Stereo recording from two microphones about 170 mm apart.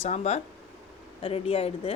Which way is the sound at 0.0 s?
40° left (ahead or behind).